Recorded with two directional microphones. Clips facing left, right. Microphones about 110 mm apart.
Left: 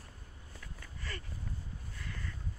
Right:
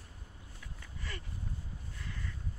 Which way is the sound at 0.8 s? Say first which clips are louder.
Even; 15° right (ahead or behind).